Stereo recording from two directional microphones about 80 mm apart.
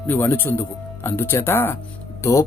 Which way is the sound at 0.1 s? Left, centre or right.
Left.